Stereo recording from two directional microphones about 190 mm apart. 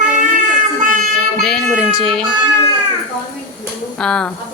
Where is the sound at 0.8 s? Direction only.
45° right (ahead or behind).